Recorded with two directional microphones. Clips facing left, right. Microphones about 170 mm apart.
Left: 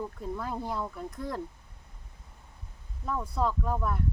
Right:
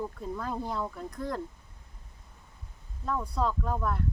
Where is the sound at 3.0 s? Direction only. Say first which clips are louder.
Even; 5° left (ahead or behind).